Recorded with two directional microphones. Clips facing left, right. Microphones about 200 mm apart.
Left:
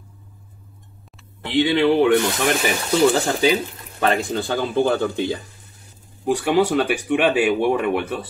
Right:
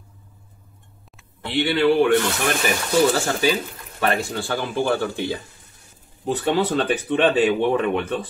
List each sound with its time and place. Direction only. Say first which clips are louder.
1.4 s speech: left 2 dB; 15° left (ahead or behind)